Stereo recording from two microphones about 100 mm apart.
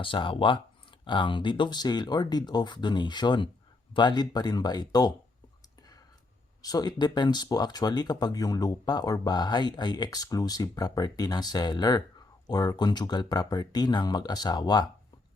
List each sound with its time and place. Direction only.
0.0 s speech: 60° left (ahead or behind); by 5.1 s 40° left (ahead or behind)
6.6 s speech: 40° left (ahead or behind)